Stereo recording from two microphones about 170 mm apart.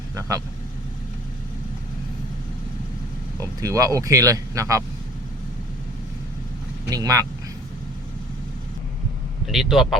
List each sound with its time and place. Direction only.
0.1 s speech: 20° right (ahead or behind)
3.4 s speech: 20° right (ahead or behind)
6.9 s speech: 20° right (ahead or behind)
9.5 s speech: centre (ahead or behind)